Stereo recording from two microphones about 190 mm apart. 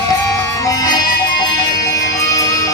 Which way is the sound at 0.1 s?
20° left (ahead or behind).